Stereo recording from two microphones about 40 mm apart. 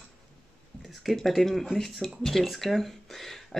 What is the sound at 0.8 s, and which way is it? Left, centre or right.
Speech, centre.